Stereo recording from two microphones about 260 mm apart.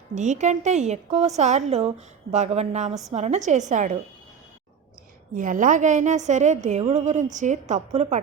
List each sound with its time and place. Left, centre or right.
0.1 s a woman's voice: right
2.9 s a woman's voice: centre
3.2 s a woman's voice: right
5.3 s a woman's voice: right